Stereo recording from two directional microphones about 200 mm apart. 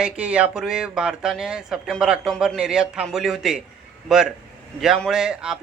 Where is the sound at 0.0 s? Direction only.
5° right (ahead or behind).